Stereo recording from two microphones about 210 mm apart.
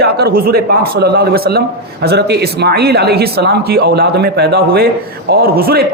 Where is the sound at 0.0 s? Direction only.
50° right (ahead or behind).